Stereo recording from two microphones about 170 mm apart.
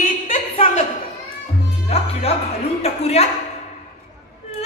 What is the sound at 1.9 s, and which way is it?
Music, 35° left (ahead or behind).